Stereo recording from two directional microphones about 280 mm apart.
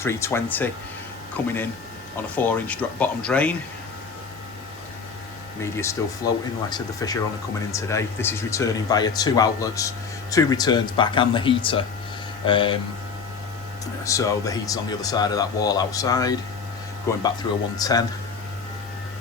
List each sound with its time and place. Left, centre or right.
0.0 s speech: centre
5.7 s speech: centre
14.0 s speech: centre